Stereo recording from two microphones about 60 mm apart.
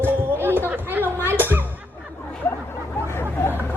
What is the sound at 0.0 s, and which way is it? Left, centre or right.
Chatter, right.